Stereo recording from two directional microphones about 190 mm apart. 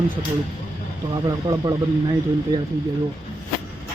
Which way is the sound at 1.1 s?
20° right (ahead or behind).